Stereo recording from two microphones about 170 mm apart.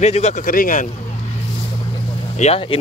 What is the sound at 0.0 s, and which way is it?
Speech, 40° left (ahead or behind).